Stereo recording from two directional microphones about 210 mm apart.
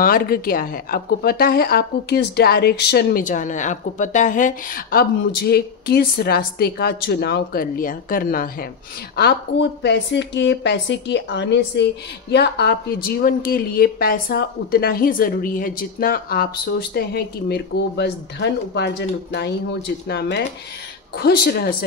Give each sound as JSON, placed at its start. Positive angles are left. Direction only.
{"t": 0.0, "sound": "a woman's voice", "side_deg": 45}